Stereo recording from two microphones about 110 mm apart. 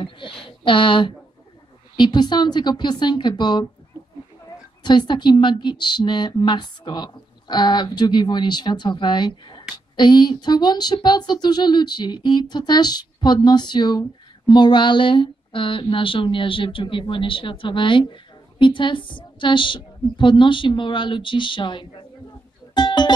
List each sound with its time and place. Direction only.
0.4 s speech: 50° left (ahead or behind)
4.8 s a woman's voice: 45° left (ahead or behind)
22.8 s music: 40° left (ahead or behind)